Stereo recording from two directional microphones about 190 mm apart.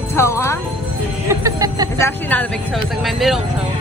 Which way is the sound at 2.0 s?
10° left (ahead or behind).